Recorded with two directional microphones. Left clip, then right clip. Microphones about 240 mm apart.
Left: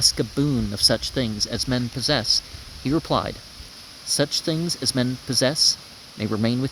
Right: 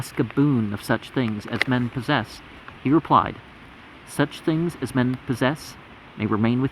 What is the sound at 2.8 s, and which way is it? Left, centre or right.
Speech, left.